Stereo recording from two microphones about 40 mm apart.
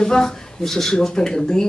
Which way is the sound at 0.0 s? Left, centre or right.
Centre.